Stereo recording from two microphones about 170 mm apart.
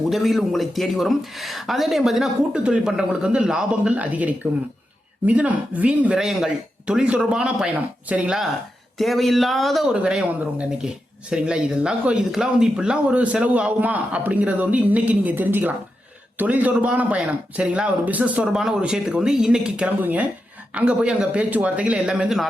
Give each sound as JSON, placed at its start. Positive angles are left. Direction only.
{"t": 0.1, "sound": "speech", "side_deg": 0}